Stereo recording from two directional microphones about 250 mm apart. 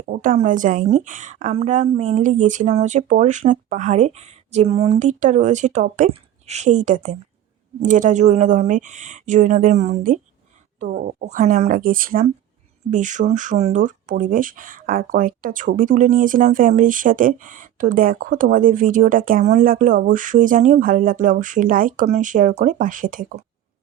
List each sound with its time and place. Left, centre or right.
0.1 s a woman's voice: right